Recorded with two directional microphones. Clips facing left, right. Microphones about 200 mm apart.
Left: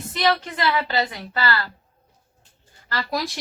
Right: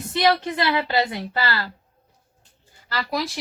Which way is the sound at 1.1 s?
20° right (ahead or behind).